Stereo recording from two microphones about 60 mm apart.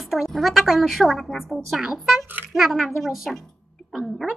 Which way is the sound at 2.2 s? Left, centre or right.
Right.